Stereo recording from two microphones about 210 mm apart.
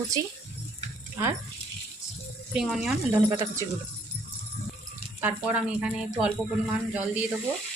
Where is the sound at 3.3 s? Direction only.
15° right (ahead or behind).